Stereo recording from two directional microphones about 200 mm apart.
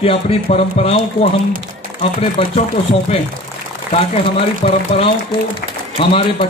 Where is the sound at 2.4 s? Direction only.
30° left (ahead or behind).